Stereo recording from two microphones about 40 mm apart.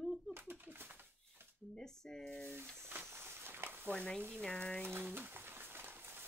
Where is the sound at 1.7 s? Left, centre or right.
Centre.